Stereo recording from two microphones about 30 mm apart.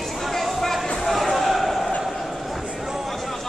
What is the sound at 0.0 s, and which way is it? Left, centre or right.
Music, centre.